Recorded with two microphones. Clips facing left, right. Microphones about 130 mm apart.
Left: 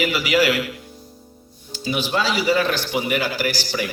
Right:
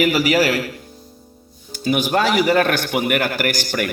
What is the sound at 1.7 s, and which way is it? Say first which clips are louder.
A man's voice: right 5 dB; 50° right (ahead or behind).